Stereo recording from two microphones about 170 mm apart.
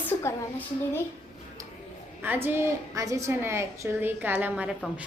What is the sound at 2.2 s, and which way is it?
A woman's voice, 10° right (ahead or behind).